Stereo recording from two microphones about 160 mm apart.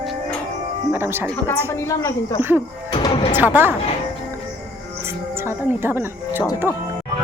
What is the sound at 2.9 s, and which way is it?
Music, 25° left (ahead or behind).